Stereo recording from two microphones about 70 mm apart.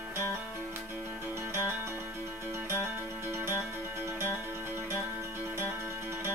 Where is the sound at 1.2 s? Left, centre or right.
Right.